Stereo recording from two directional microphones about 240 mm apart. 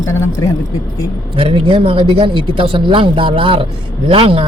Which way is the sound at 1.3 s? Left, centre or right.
Right.